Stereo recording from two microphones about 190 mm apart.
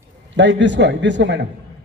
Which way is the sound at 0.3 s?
70° right (ahead or behind).